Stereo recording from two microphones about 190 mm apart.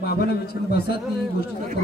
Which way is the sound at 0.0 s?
55° left (ahead or behind).